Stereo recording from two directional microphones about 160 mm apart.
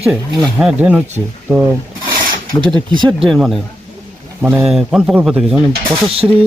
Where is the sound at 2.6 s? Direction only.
30° right (ahead or behind).